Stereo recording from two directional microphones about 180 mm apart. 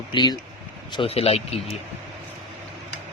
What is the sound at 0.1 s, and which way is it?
Speech, 25° left (ahead or behind).